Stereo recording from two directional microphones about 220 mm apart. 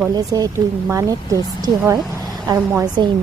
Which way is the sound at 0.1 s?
15° right (ahead or behind).